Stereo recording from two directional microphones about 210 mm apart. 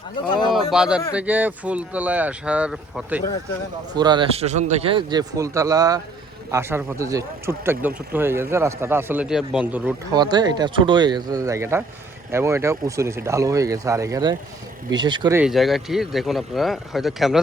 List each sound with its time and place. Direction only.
0.3 s speech: 20° left (ahead or behind)
0.5 s speech: 5° right (ahead or behind)
3.9 s a man's voice: 20° right (ahead or behind)
10.1 s a man's voice: 20° right (ahead or behind)
15.4 s speech: centre (ahead or behind)